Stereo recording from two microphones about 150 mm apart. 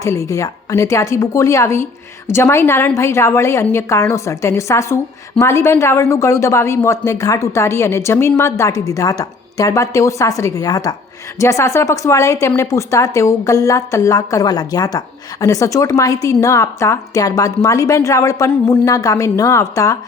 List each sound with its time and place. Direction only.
0.0 s a woman's voice: 20° left (ahead or behind)